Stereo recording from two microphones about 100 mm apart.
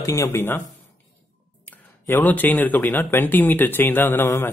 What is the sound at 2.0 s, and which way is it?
Speech, 20° left (ahead or behind).